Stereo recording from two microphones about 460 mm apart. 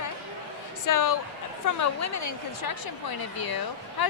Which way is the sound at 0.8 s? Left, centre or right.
Left.